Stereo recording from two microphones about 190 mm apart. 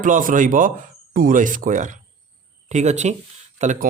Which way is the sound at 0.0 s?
45° right (ahead or behind).